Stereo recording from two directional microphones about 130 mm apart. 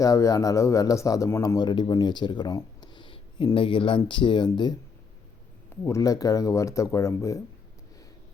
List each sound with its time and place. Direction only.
0.0 s speech: 25° left (ahead or behind)
5.8 s speech: 25° left (ahead or behind)